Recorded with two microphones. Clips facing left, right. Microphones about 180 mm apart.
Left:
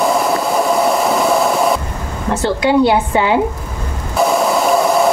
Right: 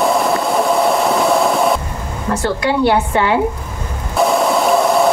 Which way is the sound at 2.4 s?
15° left (ahead or behind).